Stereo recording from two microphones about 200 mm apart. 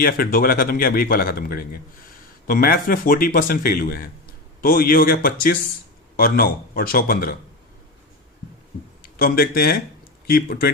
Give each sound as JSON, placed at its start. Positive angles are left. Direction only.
{"t": 0.0, "sound": "a man's voice", "side_deg": 50}
{"t": 9.1, "sound": "a man's voice", "side_deg": 50}